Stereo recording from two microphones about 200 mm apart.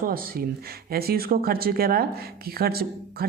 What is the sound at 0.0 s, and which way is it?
Speech, 45° right (ahead or behind).